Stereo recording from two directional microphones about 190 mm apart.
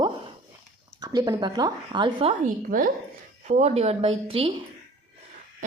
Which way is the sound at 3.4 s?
35° right (ahead or behind).